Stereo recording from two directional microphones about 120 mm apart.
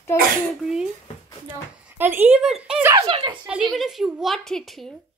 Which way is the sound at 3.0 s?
50° right (ahead or behind).